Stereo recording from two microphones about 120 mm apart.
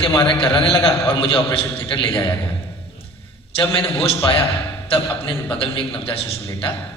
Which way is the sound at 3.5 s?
45° left (ahead or behind).